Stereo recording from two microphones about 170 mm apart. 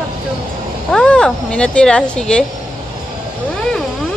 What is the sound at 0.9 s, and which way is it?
Speech, 5° left (ahead or behind).